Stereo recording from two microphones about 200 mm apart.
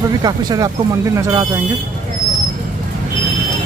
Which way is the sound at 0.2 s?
20° right (ahead or behind).